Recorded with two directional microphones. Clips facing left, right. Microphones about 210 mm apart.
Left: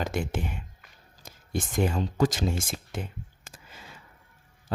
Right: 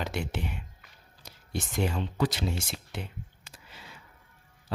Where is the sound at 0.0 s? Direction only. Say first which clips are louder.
Left 3 dB; 50° left (ahead or behind).